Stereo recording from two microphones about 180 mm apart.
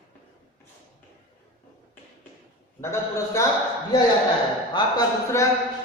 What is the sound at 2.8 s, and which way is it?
Speech, 15° left (ahead or behind).